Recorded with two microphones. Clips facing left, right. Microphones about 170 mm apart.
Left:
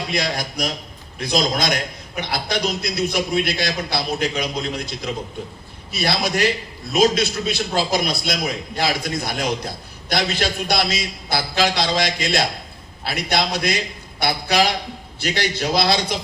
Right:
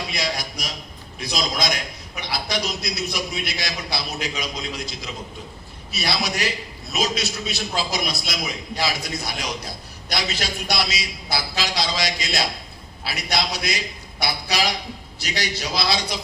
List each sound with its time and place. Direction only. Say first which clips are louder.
0.1 s a man's voice: left 4 dB; 50° left (ahead or behind)